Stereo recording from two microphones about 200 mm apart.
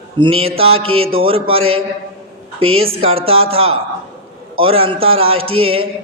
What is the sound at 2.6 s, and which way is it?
Speech, 90° right.